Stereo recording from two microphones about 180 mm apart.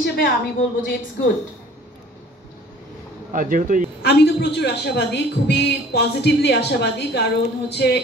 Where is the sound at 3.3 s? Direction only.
50° right (ahead or behind).